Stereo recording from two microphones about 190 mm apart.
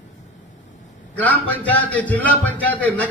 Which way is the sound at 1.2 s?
10° left (ahead or behind).